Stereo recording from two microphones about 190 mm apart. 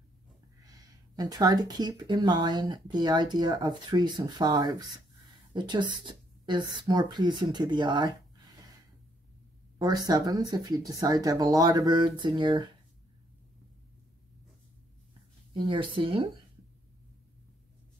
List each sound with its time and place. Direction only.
0.7 s speech: 20° right (ahead or behind)
9.8 s speech: 20° right (ahead or behind)
15.5 s speech: 25° right (ahead or behind)